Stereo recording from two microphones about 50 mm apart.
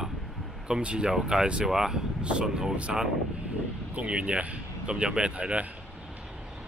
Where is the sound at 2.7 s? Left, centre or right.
Right.